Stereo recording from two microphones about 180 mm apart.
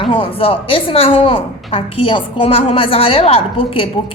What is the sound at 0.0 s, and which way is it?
A woman's voice, 30° left (ahead or behind).